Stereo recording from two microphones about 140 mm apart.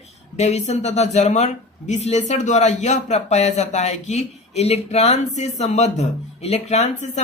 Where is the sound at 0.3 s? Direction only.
55° left (ahead or behind).